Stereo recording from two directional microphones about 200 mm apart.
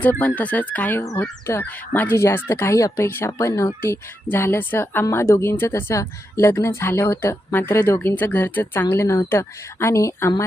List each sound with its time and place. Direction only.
0.0 s speech: 10° left (ahead or behind)